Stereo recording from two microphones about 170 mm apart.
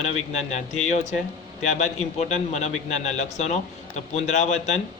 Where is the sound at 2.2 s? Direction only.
40° left (ahead or behind).